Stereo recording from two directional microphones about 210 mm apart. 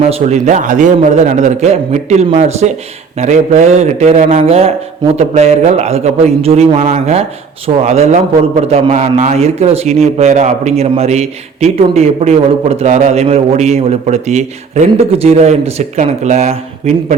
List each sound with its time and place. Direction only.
0.1 s a man's voice: 30° right (ahead or behind)